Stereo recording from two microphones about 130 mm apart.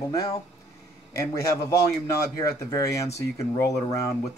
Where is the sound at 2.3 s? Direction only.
25° left (ahead or behind).